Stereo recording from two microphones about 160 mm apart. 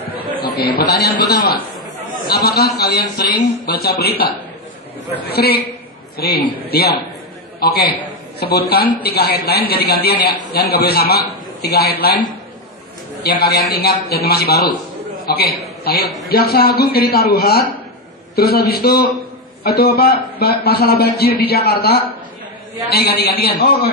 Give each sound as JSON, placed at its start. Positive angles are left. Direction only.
{"t": 0.5, "sound": "a man's voice", "side_deg": 85}
{"t": 2.2, "sound": "a man's voice", "side_deg": 80}